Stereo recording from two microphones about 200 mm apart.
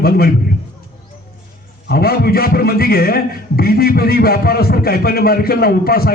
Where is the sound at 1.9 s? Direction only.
50° left (ahead or behind).